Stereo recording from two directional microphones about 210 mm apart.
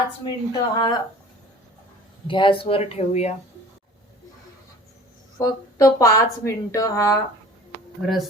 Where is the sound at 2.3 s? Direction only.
25° left (ahead or behind).